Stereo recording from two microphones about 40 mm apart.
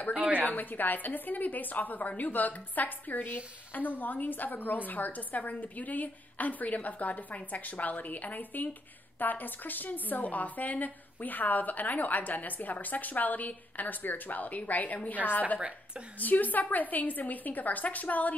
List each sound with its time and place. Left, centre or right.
0.5 s a woman's voice: left